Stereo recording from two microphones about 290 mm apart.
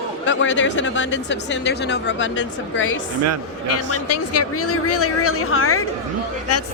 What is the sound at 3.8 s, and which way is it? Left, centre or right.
Speech, left.